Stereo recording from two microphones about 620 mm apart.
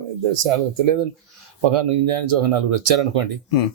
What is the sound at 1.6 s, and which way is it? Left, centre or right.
Speech, right.